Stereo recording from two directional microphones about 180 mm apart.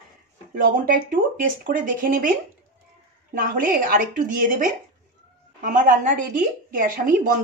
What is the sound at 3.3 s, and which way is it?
A woman's voice, 50° right (ahead or behind).